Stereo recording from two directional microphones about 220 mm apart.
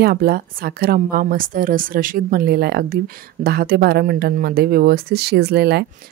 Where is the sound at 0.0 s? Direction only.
45° right (ahead or behind).